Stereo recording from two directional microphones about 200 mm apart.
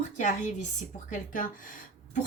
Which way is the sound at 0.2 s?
40° left (ahead or behind).